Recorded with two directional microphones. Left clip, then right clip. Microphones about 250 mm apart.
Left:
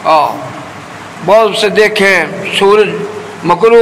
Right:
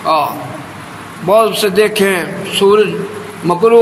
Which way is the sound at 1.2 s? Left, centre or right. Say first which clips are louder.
Left 3 dB; right.